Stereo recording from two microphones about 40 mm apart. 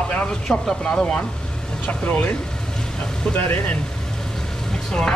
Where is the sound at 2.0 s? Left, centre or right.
Left.